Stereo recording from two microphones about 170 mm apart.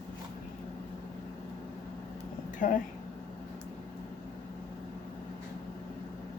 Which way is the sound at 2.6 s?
45° left (ahead or behind).